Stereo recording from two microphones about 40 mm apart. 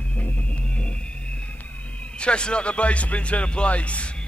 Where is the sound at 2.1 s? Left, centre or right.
Left.